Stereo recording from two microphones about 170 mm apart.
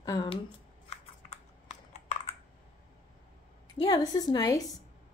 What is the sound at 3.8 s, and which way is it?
Speech, 25° left (ahead or behind).